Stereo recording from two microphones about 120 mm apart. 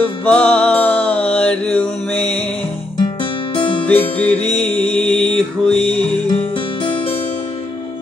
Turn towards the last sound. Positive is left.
turn(degrees=45)  # may be behind; listen again after turning